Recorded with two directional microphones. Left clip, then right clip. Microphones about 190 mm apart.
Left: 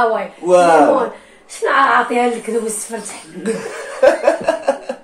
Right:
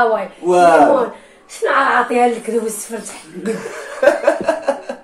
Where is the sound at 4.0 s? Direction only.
15° right (ahead or behind).